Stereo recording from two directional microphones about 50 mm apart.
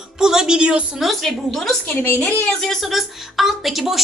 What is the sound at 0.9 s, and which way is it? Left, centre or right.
A woman's voice, centre.